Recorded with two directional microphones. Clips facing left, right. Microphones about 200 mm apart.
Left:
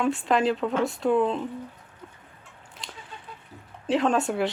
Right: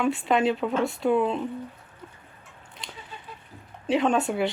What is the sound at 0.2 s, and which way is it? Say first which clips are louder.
Speech: even; centre (ahead or behind).